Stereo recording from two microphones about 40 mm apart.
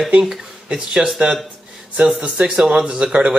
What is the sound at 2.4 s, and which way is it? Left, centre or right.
Speech, centre.